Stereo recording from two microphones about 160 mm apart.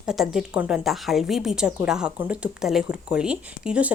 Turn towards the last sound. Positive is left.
turn(degrees=-5)  # may be behind; listen again after turning